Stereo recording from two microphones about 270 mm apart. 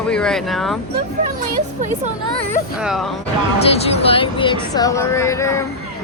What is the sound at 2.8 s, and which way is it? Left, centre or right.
Speech, centre.